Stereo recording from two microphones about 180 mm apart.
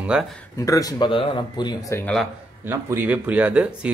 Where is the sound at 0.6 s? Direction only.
20° left (ahead or behind).